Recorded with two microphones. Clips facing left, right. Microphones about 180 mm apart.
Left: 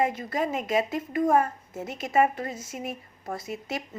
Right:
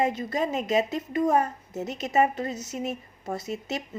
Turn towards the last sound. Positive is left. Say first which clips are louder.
# right 2 dB
turn(degrees=-25)  # may be behind; listen again after turning